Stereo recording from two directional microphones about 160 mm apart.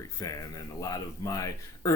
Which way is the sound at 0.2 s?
20° left (ahead or behind).